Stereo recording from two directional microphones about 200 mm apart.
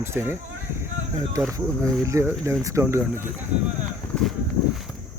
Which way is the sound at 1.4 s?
15° right (ahead or behind).